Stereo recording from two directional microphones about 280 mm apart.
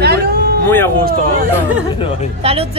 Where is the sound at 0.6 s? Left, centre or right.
Centre.